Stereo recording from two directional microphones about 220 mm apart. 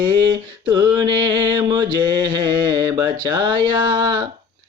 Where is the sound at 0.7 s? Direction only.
20° right (ahead or behind).